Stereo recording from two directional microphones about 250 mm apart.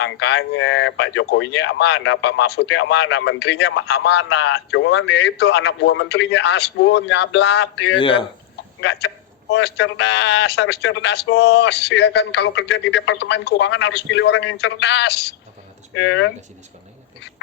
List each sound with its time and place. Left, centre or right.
0.0 s speech: left
7.9 s speech: centre
8.8 s speech: left